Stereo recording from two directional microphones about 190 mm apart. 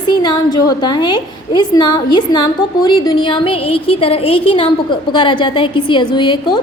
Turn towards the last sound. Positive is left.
turn(degrees=25)  # may be behind; listen again after turning